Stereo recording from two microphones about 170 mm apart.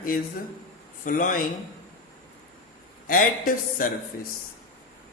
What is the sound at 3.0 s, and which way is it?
Speech, 55° left (ahead or behind).